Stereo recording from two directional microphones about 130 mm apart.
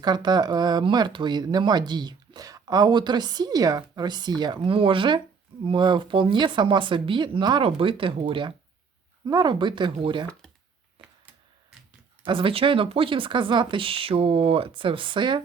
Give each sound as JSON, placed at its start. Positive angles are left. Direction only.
{"t": 0.0, "sound": "speech", "side_deg": -35}
{"t": 12.2, "sound": "speech", "side_deg": -40}